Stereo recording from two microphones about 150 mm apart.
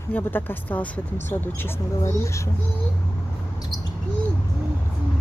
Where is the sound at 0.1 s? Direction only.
10° left (ahead or behind).